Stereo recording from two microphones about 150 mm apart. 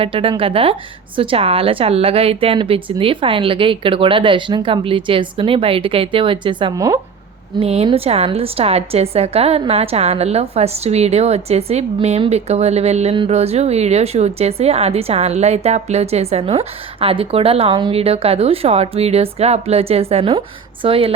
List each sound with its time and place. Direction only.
0.0 s a woman's voice: 35° right (ahead or behind)
7.6 s a woman's voice: 40° right (ahead or behind)